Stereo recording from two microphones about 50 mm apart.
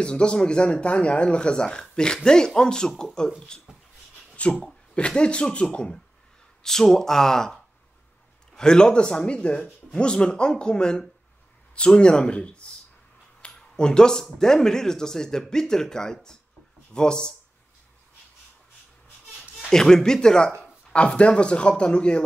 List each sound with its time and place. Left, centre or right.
0.0 s speech: centre
4.4 s speech: left
6.6 s speech: centre
13.4 s a sound: centre
14.4 s speech: centre
19.7 s speech: centre